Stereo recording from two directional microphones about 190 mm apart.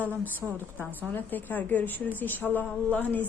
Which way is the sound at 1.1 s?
10° left (ahead or behind).